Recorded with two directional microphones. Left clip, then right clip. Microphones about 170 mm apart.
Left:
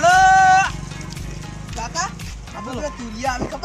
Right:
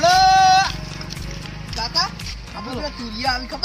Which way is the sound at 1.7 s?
10° right (ahead or behind).